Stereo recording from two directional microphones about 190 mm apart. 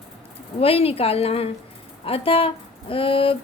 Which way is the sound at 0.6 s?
30° left (ahead or behind).